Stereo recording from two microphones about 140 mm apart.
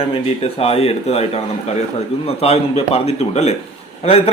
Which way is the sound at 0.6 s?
45° left (ahead or behind).